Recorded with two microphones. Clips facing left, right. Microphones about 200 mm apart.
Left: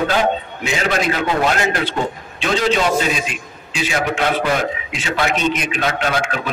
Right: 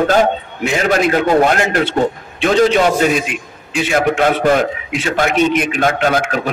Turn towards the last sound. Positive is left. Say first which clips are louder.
# right 5 dB
turn(degrees=-45)  # may be behind; listen again after turning